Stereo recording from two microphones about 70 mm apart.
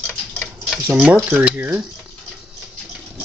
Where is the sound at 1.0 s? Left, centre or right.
Right.